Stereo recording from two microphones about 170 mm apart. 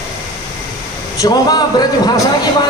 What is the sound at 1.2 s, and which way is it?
Speech, 25° left (ahead or behind).